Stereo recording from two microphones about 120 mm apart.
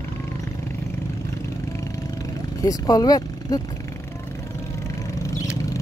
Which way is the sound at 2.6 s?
30° left (ahead or behind).